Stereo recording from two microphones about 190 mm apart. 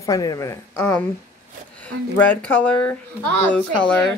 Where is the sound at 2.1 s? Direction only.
10° left (ahead or behind).